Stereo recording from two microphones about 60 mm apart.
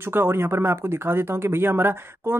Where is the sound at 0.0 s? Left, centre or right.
Right.